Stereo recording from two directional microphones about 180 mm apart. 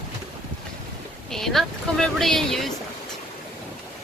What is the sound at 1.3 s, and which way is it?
Speech, centre (ahead or behind).